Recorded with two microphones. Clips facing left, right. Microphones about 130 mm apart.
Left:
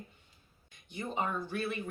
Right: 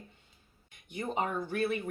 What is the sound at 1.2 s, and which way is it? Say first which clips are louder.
Speech: right 3 dB; 50° right (ahead or behind).